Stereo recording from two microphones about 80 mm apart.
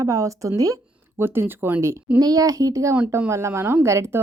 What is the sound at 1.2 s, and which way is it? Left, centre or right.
Speech, right.